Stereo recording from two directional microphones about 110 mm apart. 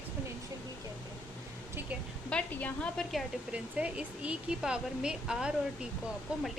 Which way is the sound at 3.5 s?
10° right (ahead or behind).